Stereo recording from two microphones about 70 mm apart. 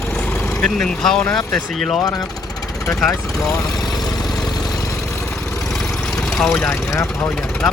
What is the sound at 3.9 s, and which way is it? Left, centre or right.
Vehicle, centre.